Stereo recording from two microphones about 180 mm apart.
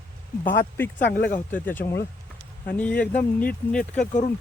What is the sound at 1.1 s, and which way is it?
Speech, 65° left (ahead or behind).